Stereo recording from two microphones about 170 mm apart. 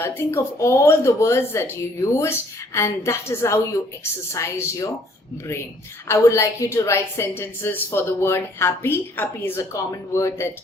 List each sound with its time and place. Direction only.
0.0 s a woman's voice: 15° left (ahead or behind)
6.1 s a woman's voice: 15° left (ahead or behind)